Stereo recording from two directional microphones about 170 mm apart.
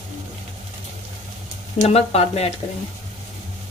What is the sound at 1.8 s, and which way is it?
Speech, 35° left (ahead or behind).